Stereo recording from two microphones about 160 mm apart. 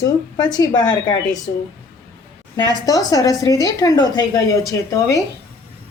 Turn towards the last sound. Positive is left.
turn(degrees=20)  # may be behind; listen again after turning